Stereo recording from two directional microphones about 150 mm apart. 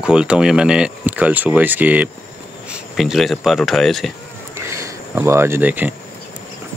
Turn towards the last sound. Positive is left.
turn(degrees=-10)  # may be behind; listen again after turning